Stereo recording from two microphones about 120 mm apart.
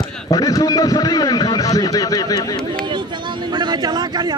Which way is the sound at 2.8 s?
40° right (ahead or behind).